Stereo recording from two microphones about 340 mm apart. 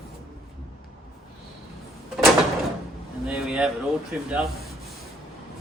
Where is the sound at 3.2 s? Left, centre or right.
Centre.